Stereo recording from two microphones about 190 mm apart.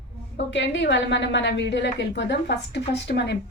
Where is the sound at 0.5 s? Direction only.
70° left (ahead or behind).